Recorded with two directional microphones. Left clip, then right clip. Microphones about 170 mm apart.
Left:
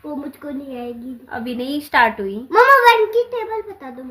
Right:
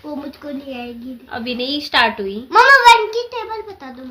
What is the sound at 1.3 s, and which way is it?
A woman's voice, 15° left (ahead or behind).